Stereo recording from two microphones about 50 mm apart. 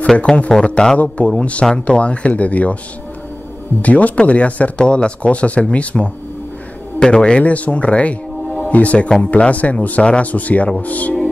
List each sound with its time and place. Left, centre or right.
0.3 s a man's voice: centre
0.7 s a man's voice: centre
3.8 s speech: left